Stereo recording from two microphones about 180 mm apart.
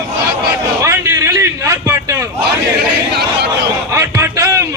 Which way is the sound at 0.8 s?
15° right (ahead or behind).